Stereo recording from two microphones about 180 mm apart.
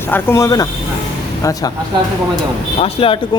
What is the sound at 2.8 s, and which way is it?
Speech, 30° left (ahead or behind).